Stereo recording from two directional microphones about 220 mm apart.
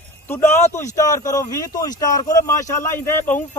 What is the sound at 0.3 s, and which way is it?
A man's voice, 10° left (ahead or behind).